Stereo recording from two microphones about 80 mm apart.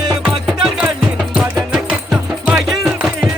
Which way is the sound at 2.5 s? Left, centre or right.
Centre.